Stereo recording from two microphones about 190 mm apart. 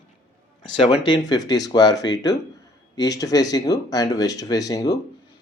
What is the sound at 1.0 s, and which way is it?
Speech, 20° left (ahead or behind).